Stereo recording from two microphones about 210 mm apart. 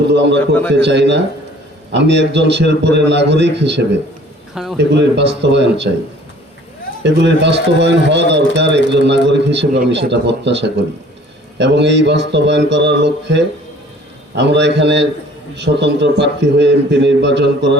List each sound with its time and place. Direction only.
0.1 s speech: 55° right (ahead or behind)
0.3 s a man's voice: 10° left (ahead or behind)
0.7 s speech: 55° right (ahead or behind)
4.5 s a man's voice: centre (ahead or behind)
4.8 s speech: 55° right (ahead or behind)
7.0 s speech: 55° right (ahead or behind)